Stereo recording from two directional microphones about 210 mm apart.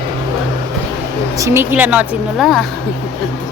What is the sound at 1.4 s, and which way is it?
A woman's voice, 10° right (ahead or behind).